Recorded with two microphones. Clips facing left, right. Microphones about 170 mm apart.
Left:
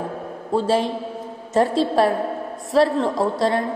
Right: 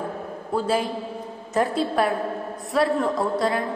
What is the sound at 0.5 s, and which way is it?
A woman's voice, 25° left (ahead or behind).